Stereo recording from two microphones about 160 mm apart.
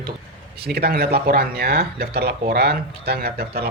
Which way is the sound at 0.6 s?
90° right.